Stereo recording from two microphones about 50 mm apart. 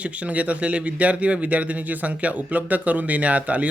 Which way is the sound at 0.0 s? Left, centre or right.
Right.